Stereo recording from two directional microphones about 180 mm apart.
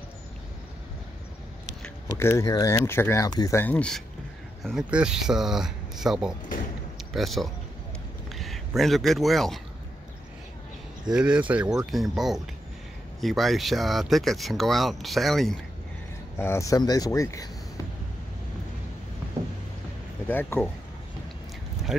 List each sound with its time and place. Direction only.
1.8 s speech: 15° left (ahead or behind)
4.6 s speech: 5° right (ahead or behind)
11.1 s speech: 5° right (ahead or behind)
16.3 s speech: 15° left (ahead or behind)
20.2 s speech: 10° left (ahead or behind)